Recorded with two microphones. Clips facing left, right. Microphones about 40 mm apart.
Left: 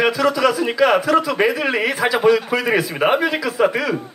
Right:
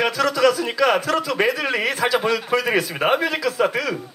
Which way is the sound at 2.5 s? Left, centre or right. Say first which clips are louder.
Left 1 dB; left.